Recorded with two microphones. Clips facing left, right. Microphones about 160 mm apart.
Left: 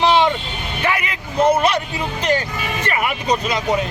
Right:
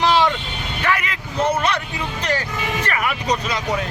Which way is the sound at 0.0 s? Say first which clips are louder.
Left 2 dB; 20° left (ahead or behind).